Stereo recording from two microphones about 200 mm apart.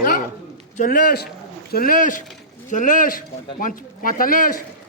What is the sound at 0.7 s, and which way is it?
A man's voice, 40° left (ahead or behind).